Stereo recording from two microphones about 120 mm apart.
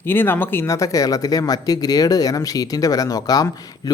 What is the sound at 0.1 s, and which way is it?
Speech, 15° left (ahead or behind).